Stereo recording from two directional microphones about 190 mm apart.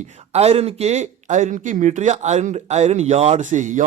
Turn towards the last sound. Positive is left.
turn(degrees=-40)  # may be behind; listen again after turning